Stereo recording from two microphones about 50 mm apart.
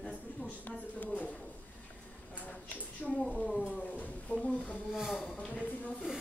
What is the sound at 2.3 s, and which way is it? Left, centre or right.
Speech, left.